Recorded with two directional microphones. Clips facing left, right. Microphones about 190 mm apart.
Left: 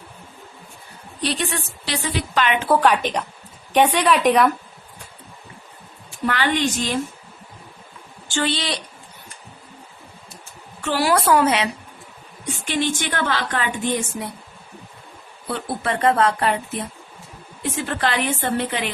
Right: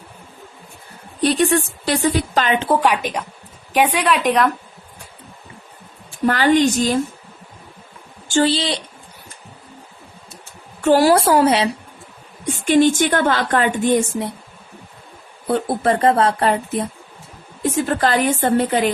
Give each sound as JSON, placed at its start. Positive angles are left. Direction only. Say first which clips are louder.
{"t": 1.2, "sound": "a woman's voice", "louder": "right 9 dB", "side_deg": -45}
{"t": 2.6, "sound": "a woman's voice", "louder": "even", "side_deg": -15}
{"t": 6.2, "sound": "speech", "louder": "right 7 dB", "side_deg": -40}
{"t": 8.3, "sound": "speech", "louder": "right 6 dB", "side_deg": -35}
{"t": 10.8, "sound": "a woman's voice", "louder": "right 9 dB", "side_deg": -45}
{"t": 11.1, "sound": "speech", "louder": "right 3 dB", "side_deg": -30}
{"t": 12.5, "sound": "a woman's voice", "louder": "right 9 dB", "side_deg": -50}
{"t": 15.4, "sound": "a woman's voice", "louder": "right 7 dB", "side_deg": -40}